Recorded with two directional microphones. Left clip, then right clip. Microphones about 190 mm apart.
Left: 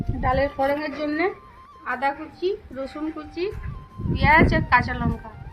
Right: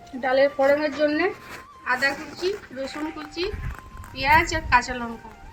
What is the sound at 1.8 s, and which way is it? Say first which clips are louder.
Speech: right 2 dB; 10° left (ahead or behind).